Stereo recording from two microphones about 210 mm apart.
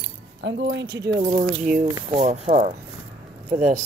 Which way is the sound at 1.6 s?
40° right (ahead or behind).